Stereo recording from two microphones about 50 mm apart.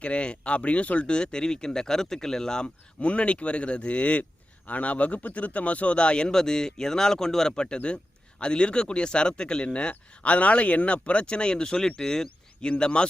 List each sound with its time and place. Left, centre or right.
0.0 s speech: left
3.0 s speech: left